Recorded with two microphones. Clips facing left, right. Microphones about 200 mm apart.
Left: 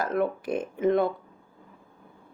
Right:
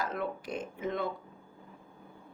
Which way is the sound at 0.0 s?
55° left (ahead or behind).